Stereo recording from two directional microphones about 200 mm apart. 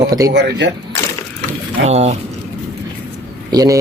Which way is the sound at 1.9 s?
30° right (ahead or behind).